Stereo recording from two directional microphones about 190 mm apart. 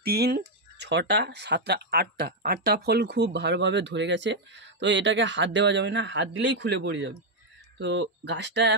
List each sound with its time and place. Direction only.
0.0 s speech: 55° right (ahead or behind)